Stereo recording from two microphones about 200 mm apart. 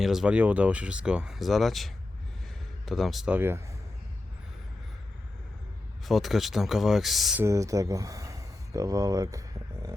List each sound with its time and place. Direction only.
0.0 s speech: centre (ahead or behind)
6.1 s speech: centre (ahead or behind)
7.4 s speech: 15° right (ahead or behind)